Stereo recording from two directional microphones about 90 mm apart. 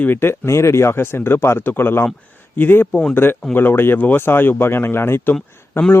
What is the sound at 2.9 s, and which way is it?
Speech, 10° left (ahead or behind).